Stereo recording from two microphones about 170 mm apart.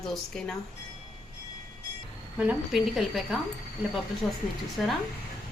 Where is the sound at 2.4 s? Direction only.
5° right (ahead or behind).